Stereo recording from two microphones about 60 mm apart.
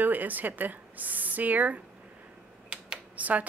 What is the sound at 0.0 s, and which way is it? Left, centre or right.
Speech, right.